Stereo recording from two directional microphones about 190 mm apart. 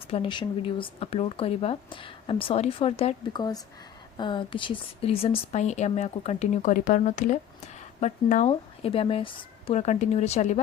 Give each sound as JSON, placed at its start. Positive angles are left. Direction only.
{"t": 0.1, "sound": "a woman's voice", "side_deg": 25}